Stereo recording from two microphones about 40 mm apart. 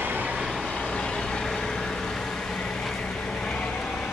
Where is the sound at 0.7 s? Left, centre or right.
Left.